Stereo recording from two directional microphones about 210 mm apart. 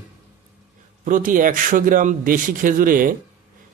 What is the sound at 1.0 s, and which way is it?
Speech, 40° right (ahead or behind).